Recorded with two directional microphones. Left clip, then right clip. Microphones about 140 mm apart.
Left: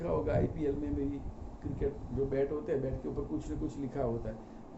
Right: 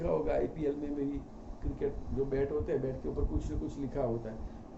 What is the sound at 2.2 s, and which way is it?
A man's voice, centre (ahead or behind).